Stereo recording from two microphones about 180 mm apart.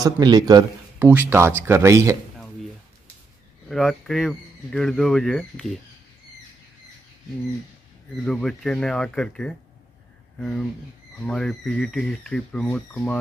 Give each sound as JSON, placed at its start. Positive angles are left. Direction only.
{"t": 0.0, "sound": "a man's voice", "side_deg": -25}
{"t": 0.9, "sound": "speech", "side_deg": -10}
{"t": 3.6, "sound": "speech", "side_deg": 0}
{"t": 8.3, "sound": "speech", "side_deg": 5}